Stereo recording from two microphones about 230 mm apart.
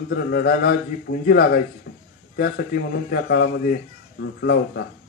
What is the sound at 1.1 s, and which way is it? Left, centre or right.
Speech, left.